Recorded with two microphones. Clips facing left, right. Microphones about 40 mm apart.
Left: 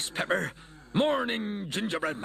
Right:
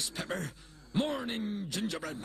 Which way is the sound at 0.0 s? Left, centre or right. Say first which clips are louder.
Left 8 dB; left.